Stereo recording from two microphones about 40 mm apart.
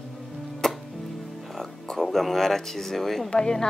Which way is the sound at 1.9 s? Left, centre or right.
Centre.